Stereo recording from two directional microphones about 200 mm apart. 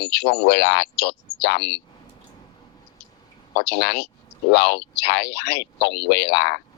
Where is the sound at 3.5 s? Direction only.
55° left (ahead or behind).